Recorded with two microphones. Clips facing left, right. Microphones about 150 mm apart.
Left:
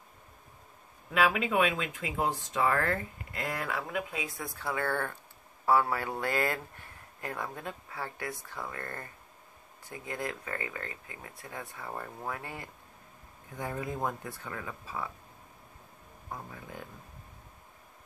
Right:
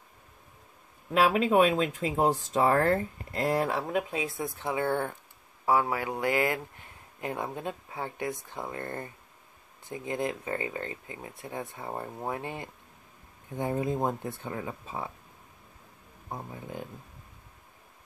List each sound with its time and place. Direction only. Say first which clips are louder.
1.1 s speech: right 5 dB; 35° right (ahead or behind)
16.3 s speech: right 4 dB; 25° right (ahead or behind)